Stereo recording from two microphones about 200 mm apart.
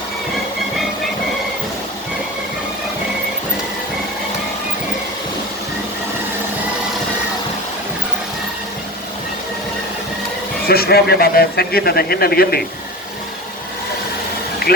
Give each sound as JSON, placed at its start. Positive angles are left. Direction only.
{"t": 10.7, "sound": "a man's voice", "side_deg": 50}